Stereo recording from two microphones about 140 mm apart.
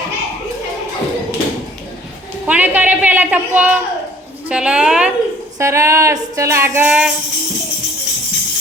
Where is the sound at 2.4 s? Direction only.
10° right (ahead or behind).